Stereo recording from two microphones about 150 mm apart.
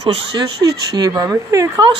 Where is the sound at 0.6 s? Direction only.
25° right (ahead or behind).